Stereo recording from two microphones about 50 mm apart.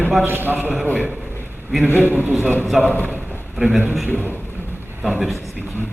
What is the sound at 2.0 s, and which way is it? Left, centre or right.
Speech, right.